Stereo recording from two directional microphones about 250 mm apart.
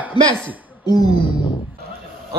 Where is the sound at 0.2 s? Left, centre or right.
Right.